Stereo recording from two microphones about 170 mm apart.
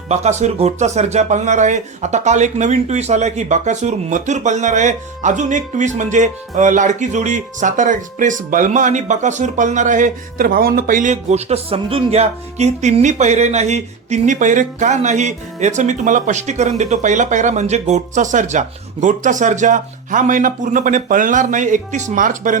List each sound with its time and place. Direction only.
0.1 s speech: 40° right (ahead or behind)